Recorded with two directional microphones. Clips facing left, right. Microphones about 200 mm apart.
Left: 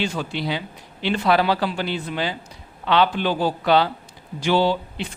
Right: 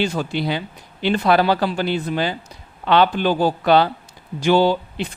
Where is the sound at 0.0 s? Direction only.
45° right (ahead or behind).